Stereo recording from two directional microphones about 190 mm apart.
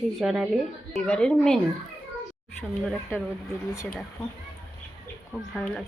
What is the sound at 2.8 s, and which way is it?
Speech, 5° right (ahead or behind).